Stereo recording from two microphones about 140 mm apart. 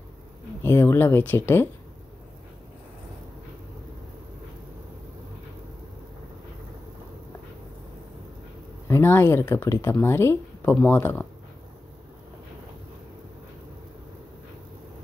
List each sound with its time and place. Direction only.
0.7 s speech: 15° left (ahead or behind)
8.8 s speech: 15° left (ahead or behind)